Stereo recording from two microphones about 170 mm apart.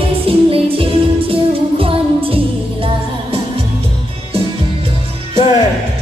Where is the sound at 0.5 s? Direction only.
35° right (ahead or behind).